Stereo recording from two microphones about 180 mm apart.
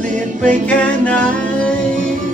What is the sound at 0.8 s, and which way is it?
Music, 5° left (ahead or behind).